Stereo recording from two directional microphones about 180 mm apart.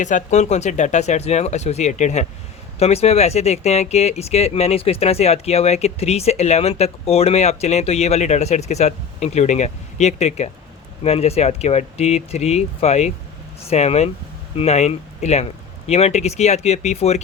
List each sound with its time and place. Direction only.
0.0 s speech: 45° left (ahead or behind)